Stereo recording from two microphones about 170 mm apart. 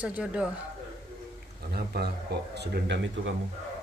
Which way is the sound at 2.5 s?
80° right.